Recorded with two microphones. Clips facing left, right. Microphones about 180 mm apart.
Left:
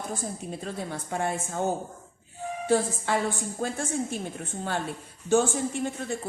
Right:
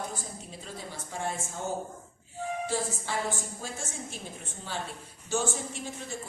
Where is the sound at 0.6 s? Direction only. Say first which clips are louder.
Left 5 dB; 60° left (ahead or behind).